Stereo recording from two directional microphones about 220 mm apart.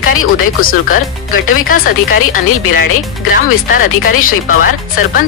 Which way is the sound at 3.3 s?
40° left (ahead or behind).